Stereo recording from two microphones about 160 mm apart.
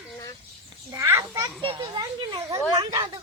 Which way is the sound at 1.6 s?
30° right (ahead or behind).